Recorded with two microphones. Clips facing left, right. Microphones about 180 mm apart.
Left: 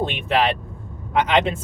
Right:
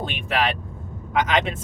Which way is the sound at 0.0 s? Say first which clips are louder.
Left 4 dB; 30° left (ahead or behind).